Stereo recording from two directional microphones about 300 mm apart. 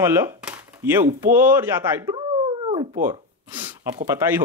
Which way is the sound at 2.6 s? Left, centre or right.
Right.